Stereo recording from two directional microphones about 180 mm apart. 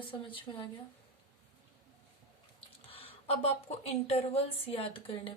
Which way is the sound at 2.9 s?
30° left (ahead or behind).